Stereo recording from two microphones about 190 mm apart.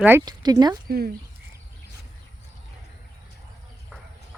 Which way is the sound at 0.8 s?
55° right (ahead or behind).